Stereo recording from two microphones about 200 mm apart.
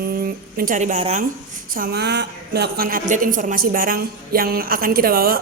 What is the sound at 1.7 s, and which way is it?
A woman's voice, 50° right (ahead or behind).